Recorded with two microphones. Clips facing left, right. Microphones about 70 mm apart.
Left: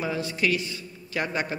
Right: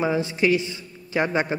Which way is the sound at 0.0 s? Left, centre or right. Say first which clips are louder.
Right 5 dB; right.